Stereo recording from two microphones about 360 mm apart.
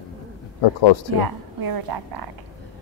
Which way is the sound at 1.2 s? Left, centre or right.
Right.